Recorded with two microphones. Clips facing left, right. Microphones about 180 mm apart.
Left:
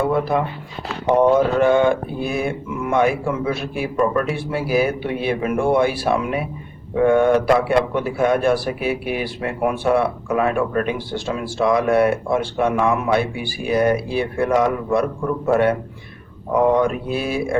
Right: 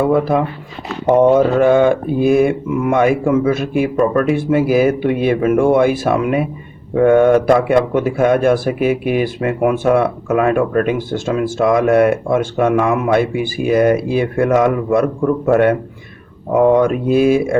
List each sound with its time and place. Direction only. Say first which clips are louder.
1.5 s speech: right 4 dB; 50° right (ahead or behind)
2.5 s speech: right 6 dB; 65° right (ahead or behind)
9.7 s speech: right 4 dB; 50° right (ahead or behind)